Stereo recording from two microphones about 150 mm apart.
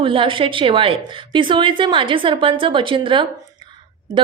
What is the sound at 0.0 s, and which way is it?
A woman's voice, 35° right (ahead or behind).